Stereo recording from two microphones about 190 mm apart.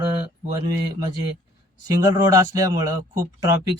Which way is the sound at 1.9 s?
20° right (ahead or behind).